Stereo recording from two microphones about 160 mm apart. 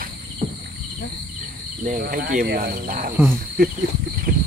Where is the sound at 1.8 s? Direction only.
60° right (ahead or behind).